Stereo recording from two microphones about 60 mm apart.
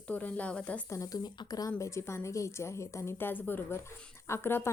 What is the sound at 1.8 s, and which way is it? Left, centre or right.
A woman's voice, left.